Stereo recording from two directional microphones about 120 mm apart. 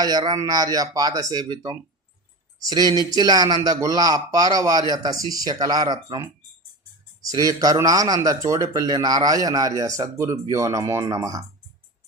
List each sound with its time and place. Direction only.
0.0 s a man's voice: 35° right (ahead or behind)